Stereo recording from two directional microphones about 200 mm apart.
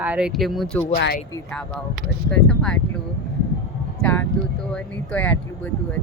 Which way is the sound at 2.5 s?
5° left (ahead or behind).